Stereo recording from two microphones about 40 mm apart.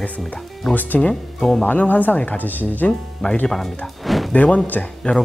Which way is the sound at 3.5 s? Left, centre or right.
Centre.